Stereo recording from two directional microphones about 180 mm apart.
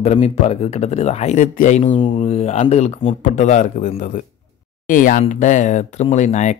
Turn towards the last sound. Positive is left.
turn(degrees=40)  # may be behind; listen again after turning